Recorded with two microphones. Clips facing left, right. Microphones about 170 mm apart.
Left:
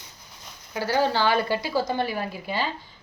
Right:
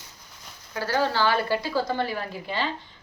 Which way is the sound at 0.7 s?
15° left (ahead or behind).